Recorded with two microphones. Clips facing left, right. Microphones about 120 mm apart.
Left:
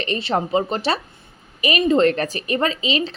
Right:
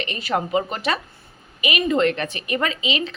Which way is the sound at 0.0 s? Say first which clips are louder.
Left 2 dB; 30° left (ahead or behind).